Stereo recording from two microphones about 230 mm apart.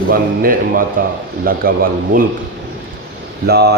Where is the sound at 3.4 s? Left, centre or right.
Right.